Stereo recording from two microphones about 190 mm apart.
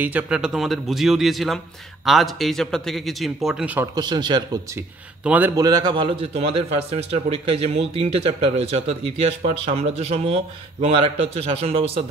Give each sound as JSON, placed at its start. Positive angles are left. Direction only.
{"t": 0.0, "sound": "a man's voice", "side_deg": -5}
{"t": 3.9, "sound": "speech", "side_deg": -20}
{"t": 5.2, "sound": "a man's voice", "side_deg": -10}
{"t": 5.6, "sound": "a man's voice", "side_deg": -20}